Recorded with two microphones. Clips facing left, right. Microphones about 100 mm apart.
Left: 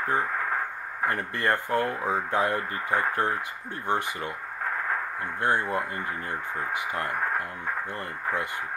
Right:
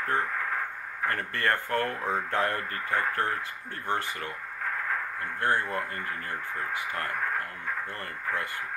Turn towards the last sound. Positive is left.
turn(degrees=20)  # may be behind; listen again after turning